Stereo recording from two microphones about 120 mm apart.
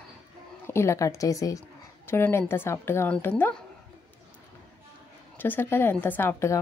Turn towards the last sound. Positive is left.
turn(degrees=20)  # may be behind; listen again after turning